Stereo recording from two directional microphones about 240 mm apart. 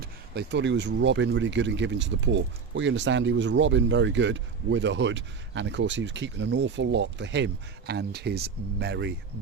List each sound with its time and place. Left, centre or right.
0.0 s speech: right